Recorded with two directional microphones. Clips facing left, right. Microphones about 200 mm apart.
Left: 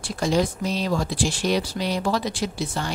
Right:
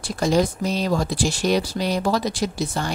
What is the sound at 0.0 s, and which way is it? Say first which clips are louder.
Speech: right 2 dB; 40° right (ahead or behind).